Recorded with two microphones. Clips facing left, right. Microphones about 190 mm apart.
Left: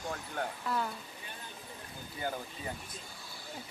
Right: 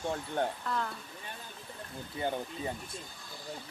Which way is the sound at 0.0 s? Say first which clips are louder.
Right 5 dB; 25° right (ahead or behind).